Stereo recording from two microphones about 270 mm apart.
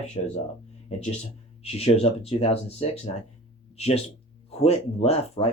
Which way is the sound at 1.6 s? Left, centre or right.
Left.